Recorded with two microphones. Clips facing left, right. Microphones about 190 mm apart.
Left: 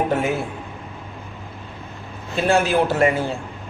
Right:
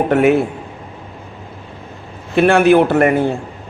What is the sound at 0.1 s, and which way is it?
Speech, 65° right (ahead or behind).